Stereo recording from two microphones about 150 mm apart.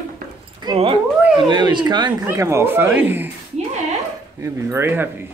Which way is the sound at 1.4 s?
30° right (ahead or behind).